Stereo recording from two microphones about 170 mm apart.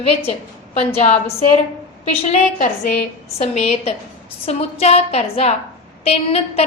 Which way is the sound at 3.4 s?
40° left (ahead or behind).